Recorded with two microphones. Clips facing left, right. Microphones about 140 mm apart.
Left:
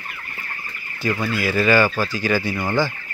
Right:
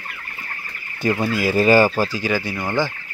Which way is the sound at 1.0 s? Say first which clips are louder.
Right 3 dB; 20° right (ahead or behind).